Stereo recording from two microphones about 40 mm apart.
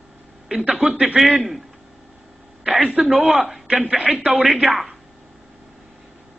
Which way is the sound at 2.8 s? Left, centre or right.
Right.